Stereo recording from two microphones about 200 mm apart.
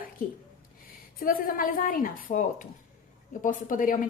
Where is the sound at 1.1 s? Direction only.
45° left (ahead or behind).